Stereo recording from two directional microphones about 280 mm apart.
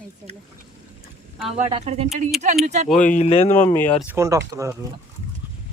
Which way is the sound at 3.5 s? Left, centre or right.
Centre.